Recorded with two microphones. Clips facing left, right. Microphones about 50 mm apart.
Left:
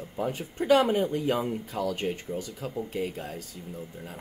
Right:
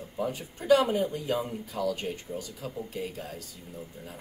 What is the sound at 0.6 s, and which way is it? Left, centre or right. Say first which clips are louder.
Speech: left 1 dB; left.